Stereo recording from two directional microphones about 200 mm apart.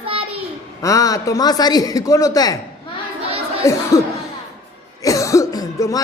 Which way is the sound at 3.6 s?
15° left (ahead or behind).